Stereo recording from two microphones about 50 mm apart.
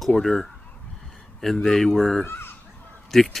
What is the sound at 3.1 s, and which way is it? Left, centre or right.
Speech, centre.